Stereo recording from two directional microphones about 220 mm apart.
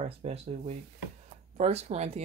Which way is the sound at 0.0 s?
30° right (ahead or behind).